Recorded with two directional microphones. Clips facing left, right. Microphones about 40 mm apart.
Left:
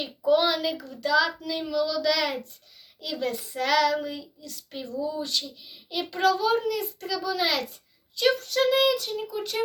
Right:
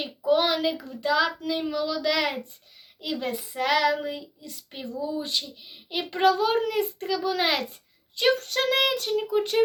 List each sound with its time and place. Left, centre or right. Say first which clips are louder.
0.3 s a child's voice: even; right
1.5 s child singing: even; right
5.9 s a child's voice: right 2 dB; right